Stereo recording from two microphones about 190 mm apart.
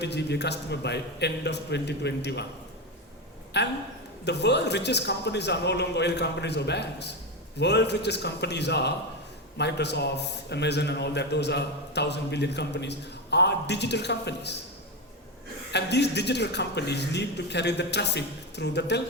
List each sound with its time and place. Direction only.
0.0 s a man's voice: 60° left (ahead or behind)
3.6 s a man's voice: 60° left (ahead or behind)
15.7 s a man's voice: 60° left (ahead or behind)